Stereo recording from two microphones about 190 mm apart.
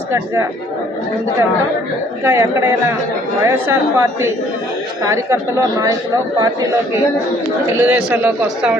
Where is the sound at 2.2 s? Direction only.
15° right (ahead or behind).